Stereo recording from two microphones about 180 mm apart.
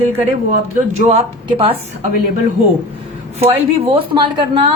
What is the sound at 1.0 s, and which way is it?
Speech, 35° right (ahead or behind).